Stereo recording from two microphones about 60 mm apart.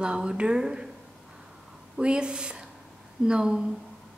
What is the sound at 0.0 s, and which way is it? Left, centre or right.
Speech, centre.